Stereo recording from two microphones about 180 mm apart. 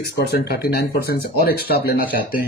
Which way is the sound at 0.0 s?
60° left (ahead or behind).